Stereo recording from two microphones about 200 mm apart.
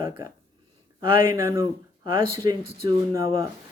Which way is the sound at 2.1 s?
15° right (ahead or behind).